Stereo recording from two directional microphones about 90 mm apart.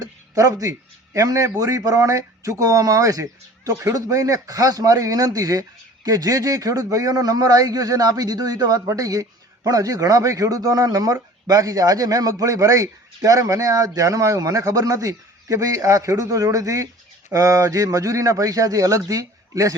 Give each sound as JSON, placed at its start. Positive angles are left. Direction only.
{"t": 0.0, "sound": "a man's voice", "side_deg": -40}